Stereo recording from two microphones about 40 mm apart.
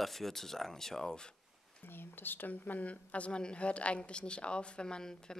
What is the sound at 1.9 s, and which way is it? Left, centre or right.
A woman's voice, left.